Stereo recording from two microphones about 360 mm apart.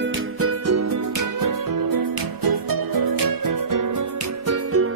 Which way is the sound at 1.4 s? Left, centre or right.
Right.